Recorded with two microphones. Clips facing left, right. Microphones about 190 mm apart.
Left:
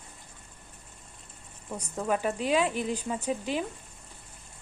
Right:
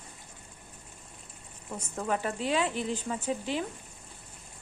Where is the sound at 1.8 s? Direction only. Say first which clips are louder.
Left 2 dB; 15° left (ahead or behind).